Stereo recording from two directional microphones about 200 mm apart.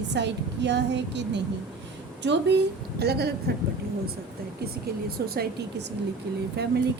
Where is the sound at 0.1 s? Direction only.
60° right (ahead or behind).